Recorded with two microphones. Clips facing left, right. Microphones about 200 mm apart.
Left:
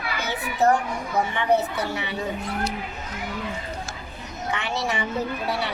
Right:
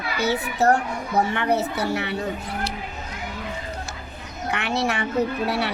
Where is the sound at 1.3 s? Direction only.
65° right (ahead or behind).